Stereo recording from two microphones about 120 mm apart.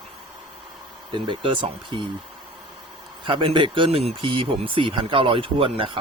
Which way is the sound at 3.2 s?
45° right (ahead or behind).